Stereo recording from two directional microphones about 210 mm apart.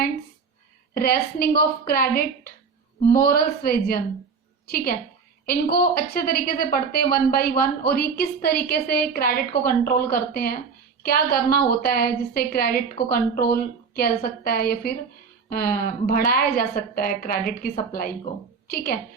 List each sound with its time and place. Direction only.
0.9 s a woman's voice: 45° left (ahead or behind)